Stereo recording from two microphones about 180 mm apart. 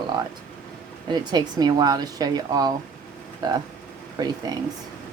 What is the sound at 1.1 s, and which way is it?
Speech, 20° right (ahead or behind).